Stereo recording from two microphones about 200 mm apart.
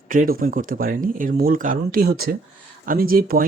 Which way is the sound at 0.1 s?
45° right (ahead or behind).